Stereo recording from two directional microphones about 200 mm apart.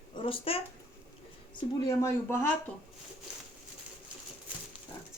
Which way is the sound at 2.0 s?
15° left (ahead or behind).